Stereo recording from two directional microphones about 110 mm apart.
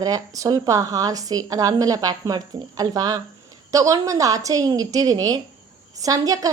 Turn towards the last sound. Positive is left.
turn(degrees=-35)  # may be behind; listen again after turning